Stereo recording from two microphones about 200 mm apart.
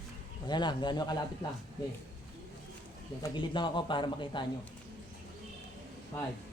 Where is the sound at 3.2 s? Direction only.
25° left (ahead or behind).